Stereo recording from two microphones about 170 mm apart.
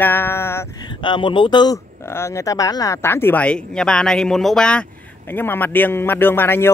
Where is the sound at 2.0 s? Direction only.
15° left (ahead or behind).